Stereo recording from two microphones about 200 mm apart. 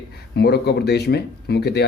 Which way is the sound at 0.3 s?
55° left (ahead or behind).